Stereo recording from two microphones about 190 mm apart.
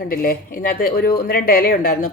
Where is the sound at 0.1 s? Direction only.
50° left (ahead or behind).